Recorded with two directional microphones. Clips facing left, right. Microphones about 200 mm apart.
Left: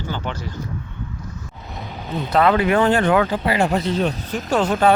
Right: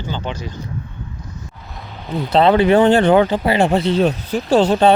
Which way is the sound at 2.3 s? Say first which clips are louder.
Right 4 dB; 30° right (ahead or behind).